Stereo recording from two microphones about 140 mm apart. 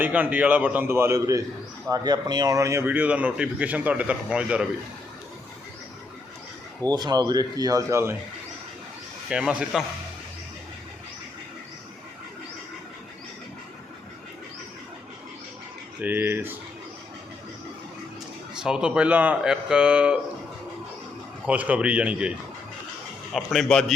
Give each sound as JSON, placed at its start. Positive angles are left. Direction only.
{"t": 0.0, "sound": "speech", "side_deg": -10}
{"t": 6.8, "sound": "speech", "side_deg": -30}
{"t": 9.3, "sound": "speech", "side_deg": -5}
{"t": 16.0, "sound": "speech", "side_deg": -15}
{"t": 18.5, "sound": "speech", "side_deg": -5}
{"t": 21.4, "sound": "a man's voice", "side_deg": -10}